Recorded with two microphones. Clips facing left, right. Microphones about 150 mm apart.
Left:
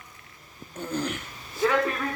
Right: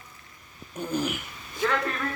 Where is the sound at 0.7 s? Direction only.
15° right (ahead or behind).